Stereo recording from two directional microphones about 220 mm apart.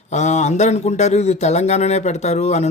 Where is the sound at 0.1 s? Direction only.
30° left (ahead or behind).